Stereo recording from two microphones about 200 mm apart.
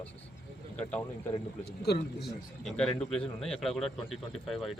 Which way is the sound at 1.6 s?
55° left (ahead or behind).